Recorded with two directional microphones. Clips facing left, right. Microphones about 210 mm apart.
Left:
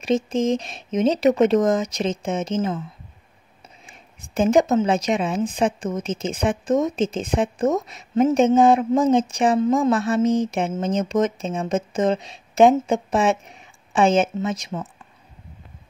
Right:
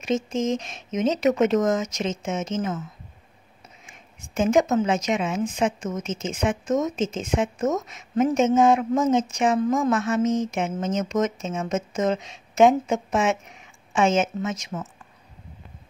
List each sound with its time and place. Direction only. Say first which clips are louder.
0.0 s a woman's voice: left 4 dB; 35° left (ahead or behind)
3.8 s a woman's voice: left 1 dB; 35° left (ahead or behind)